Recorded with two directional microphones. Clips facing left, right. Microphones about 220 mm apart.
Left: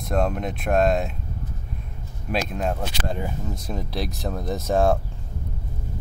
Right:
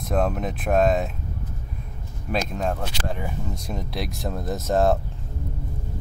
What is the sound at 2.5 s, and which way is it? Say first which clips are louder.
Speech: even; 5° left (ahead or behind).